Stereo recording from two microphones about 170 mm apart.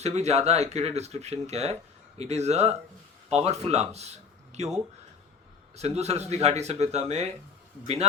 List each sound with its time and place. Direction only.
0.0 s speech: 40° right (ahead or behind)
5.7 s speech: 40° right (ahead or behind)